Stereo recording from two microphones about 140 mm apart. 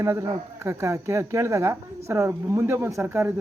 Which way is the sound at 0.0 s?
20° right (ahead or behind).